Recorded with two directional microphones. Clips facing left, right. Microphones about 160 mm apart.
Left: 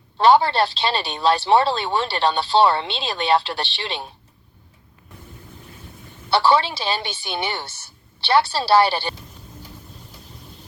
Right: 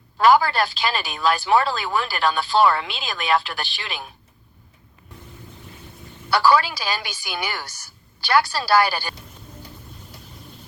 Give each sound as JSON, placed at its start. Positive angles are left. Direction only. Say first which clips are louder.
{"t": 0.2, "sound": "speech", "louder": "left 1 dB", "side_deg": 30}
{"t": 6.3, "sound": "speech", "louder": "even", "side_deg": 30}